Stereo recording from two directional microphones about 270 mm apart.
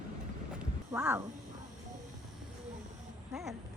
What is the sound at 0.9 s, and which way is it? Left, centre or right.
Cat, centre.